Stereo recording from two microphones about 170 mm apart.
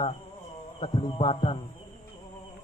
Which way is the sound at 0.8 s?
30° left (ahead or behind).